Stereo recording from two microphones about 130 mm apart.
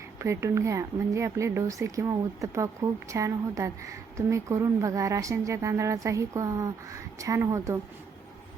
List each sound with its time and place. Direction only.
0.2 s speech: 20° right (ahead or behind)